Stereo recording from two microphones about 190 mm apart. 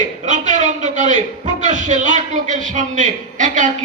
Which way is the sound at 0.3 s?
40° right (ahead or behind).